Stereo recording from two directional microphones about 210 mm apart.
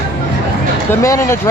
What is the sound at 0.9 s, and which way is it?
Speech, 15° left (ahead or behind).